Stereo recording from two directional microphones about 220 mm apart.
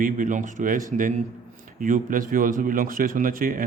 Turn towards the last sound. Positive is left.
turn(degrees=-40)  # may be behind; listen again after turning